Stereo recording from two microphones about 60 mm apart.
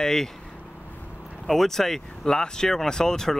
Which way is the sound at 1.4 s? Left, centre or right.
Centre.